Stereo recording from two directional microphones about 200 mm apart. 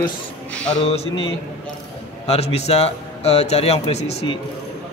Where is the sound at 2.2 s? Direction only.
30° left (ahead or behind).